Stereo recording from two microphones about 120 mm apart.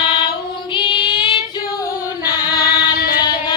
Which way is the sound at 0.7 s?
45° left (ahead or behind).